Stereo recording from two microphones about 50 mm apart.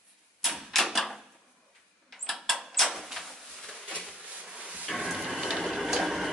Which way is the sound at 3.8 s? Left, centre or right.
Centre.